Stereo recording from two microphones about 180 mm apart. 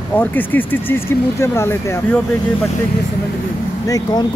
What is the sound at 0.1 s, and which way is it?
Speech, 10° left (ahead or behind).